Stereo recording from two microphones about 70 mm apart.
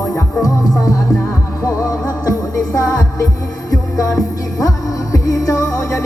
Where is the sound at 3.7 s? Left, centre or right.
Left.